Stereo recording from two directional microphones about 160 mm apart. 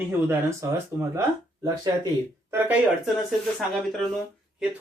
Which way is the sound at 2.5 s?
10° right (ahead or behind).